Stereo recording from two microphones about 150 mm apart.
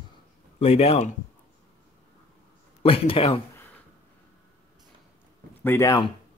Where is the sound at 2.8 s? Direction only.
35° left (ahead or behind).